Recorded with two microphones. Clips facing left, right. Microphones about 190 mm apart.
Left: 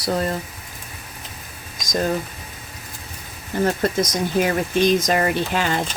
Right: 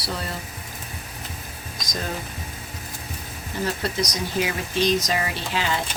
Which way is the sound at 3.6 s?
50° left (ahead or behind).